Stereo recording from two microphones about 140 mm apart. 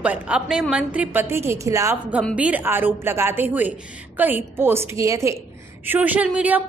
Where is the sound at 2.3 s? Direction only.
10° right (ahead or behind).